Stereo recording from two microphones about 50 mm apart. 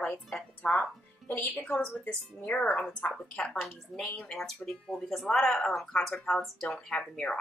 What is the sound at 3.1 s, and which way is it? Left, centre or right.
Speech, centre.